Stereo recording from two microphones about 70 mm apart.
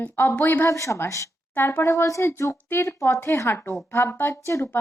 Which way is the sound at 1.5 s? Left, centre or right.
Left.